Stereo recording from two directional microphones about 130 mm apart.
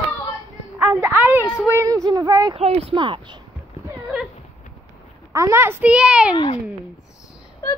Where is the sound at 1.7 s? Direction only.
25° right (ahead or behind).